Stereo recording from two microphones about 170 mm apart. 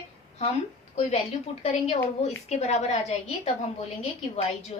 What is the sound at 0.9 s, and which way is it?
A woman's voice, 40° left (ahead or behind).